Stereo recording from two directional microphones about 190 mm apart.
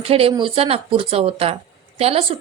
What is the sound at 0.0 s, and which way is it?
A woman's voice, 30° right (ahead or behind).